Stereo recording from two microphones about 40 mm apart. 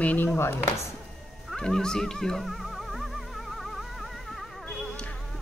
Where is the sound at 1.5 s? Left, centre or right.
Centre.